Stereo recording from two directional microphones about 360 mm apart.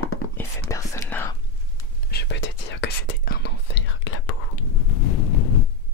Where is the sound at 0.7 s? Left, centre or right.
Centre.